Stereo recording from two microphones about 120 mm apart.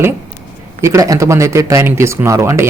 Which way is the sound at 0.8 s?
25° right (ahead or behind).